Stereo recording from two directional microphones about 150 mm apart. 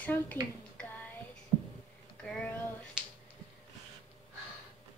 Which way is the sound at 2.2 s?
5° left (ahead or behind).